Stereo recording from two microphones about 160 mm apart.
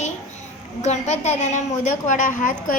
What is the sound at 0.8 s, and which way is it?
A woman's voice, 45° left (ahead or behind).